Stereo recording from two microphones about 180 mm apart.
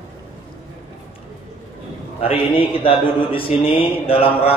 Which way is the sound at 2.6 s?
30° left (ahead or behind).